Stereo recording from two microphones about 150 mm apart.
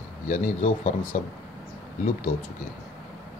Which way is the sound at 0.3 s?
55° left (ahead or behind).